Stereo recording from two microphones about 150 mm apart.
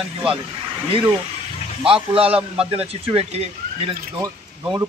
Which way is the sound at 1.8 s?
40° right (ahead or behind).